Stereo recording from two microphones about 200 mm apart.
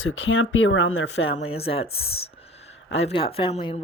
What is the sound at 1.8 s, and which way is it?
Speech, 50° left (ahead or behind).